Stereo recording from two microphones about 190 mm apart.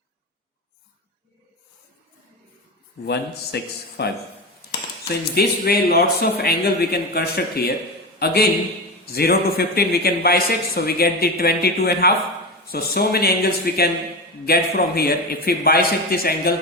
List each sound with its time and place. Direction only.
3.1 s a man's voice: 60° left (ahead or behind)